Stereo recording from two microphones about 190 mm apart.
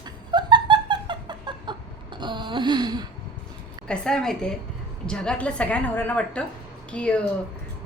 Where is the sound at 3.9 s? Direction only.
5° left (ahead or behind).